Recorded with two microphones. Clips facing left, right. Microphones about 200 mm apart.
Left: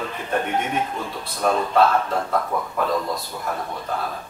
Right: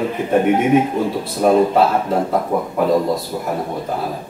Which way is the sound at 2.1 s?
25° right (ahead or behind).